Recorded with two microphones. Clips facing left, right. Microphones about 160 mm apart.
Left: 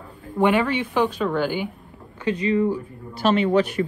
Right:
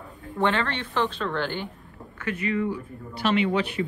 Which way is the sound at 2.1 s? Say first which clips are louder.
Left 6 dB; 30° left (ahead or behind).